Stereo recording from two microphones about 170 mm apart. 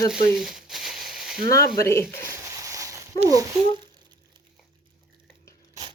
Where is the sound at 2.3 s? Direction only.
20° right (ahead or behind).